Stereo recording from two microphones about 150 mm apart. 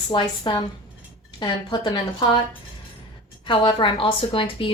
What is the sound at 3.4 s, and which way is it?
A woman's voice, 35° left (ahead or behind).